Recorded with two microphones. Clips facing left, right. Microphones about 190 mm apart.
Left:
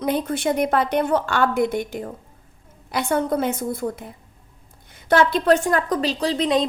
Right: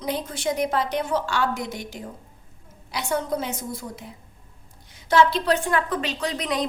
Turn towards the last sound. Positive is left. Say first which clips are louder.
# left 6 dB
turn(degrees=25)  # may be behind; listen again after turning